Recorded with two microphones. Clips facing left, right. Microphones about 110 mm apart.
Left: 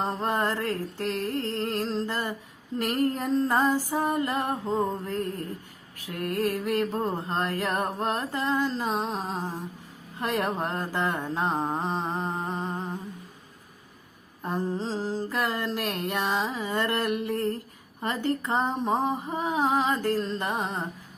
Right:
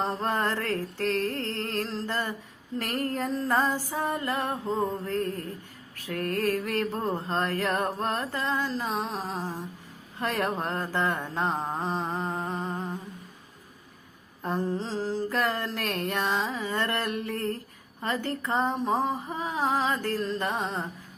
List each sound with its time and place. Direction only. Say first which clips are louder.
0.2 s mantra: left 1 dB; 15° left (ahead or behind)
8.9 s mantra: left 2 dB; 30° left (ahead or behind)
14.4 s mantra: even; 15° left (ahead or behind)